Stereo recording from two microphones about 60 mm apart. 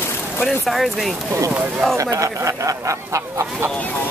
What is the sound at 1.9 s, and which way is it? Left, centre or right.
Speech, right.